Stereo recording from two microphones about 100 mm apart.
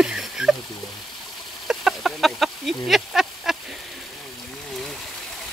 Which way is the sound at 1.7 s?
5° right (ahead or behind).